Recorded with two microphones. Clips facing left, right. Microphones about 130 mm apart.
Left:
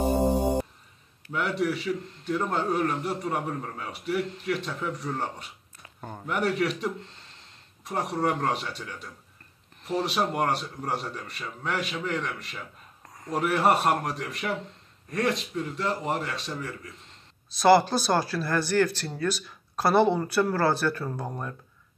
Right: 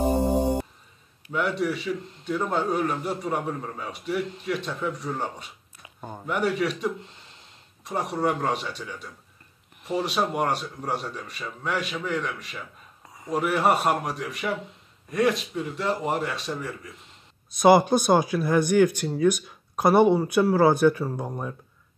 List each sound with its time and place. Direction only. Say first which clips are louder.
1.3 s a man's voice: right 1 dB; centre (ahead or behind)
5.8 s a sound: right 2 dB; 10° right (ahead or behind)
6.3 s a man's voice: right 1 dB; centre (ahead or behind)
17.6 s speech: right 2 dB; 20° right (ahead or behind)